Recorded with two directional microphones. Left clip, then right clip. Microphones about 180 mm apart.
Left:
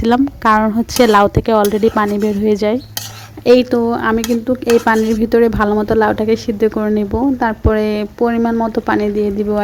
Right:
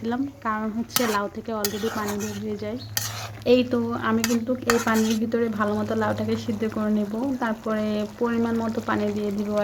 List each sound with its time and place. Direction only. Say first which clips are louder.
0.5 s a woman's voice: left 13 dB; 55° left (ahead or behind)
3.4 s dishes: left 10 dB; 40° left (ahead or behind)